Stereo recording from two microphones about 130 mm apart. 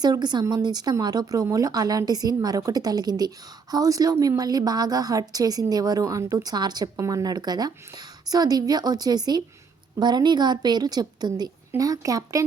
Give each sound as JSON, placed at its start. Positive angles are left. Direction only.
{"t": 0.0, "sound": "a woman's voice", "side_deg": -35}